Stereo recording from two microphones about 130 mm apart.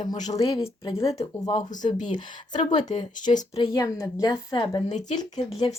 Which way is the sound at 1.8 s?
35° left (ahead or behind).